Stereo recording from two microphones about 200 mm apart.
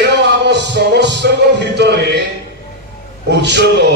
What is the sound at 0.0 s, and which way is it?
Music, 60° right (ahead or behind).